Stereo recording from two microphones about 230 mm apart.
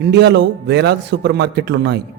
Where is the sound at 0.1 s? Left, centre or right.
Right.